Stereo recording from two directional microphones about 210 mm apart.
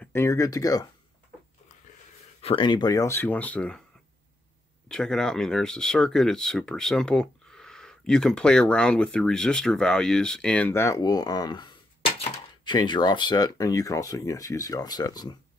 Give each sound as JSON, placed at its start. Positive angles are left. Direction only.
{"t": 0.0, "sound": "speech", "side_deg": 10}
{"t": 2.4, "sound": "speech", "side_deg": 20}
{"t": 4.8, "sound": "speech", "side_deg": 5}